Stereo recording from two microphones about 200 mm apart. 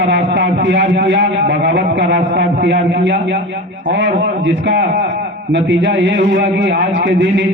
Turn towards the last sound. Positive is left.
turn(degrees=-65)  # may be behind; listen again after turning